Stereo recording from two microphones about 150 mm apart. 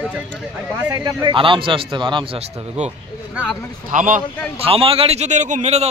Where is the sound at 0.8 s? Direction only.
20° right (ahead or behind).